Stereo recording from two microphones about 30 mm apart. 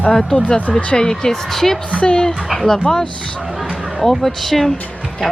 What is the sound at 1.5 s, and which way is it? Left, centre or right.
Speech, centre.